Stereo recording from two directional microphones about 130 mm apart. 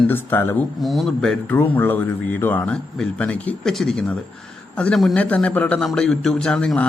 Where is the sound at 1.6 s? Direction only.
15° left (ahead or behind).